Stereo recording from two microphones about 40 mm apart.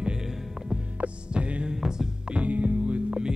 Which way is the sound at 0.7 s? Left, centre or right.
Right.